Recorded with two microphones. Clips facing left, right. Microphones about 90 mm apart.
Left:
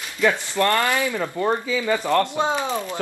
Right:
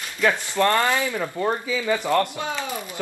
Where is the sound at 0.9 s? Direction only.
15° left (ahead or behind).